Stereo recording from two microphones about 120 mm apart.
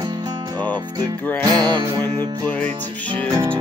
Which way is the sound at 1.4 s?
35° right (ahead or behind).